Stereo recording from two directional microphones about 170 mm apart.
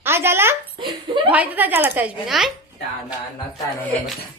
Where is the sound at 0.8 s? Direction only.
30° right (ahead or behind).